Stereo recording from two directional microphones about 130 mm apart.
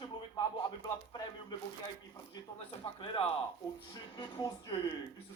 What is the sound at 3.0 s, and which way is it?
Speech, 45° left (ahead or behind).